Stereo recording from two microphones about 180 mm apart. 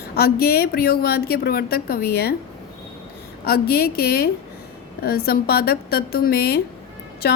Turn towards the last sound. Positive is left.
turn(degrees=60)  # may be behind; listen again after turning